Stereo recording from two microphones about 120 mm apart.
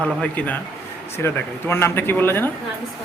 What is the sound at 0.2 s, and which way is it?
Speech, 15° left (ahead or behind).